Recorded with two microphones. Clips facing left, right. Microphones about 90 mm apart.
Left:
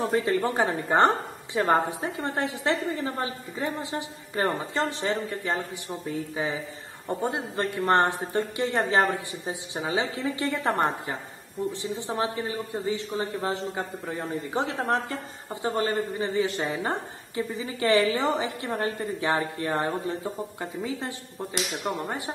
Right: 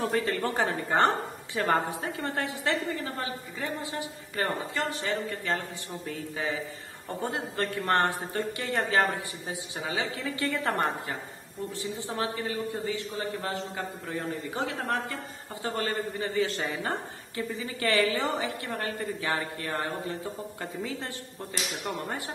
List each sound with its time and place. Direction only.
0.0 s a man's voice: 20° left (ahead or behind)
5.4 s a man's voice: 20° left (ahead or behind)